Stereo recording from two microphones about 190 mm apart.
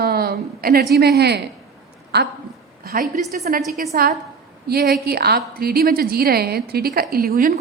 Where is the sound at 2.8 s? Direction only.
50° right (ahead or behind).